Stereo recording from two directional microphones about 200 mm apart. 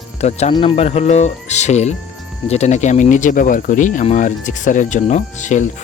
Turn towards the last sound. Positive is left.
turn(degrees=35)  # may be behind; listen again after turning